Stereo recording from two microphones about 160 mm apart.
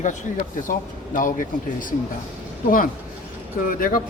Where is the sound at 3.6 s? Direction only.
60° left (ahead or behind).